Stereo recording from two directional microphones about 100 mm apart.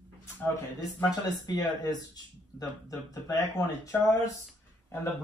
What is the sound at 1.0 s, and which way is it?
A man's voice, 40° left (ahead or behind).